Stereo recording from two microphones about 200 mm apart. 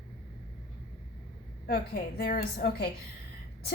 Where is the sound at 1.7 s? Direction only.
50° left (ahead or behind).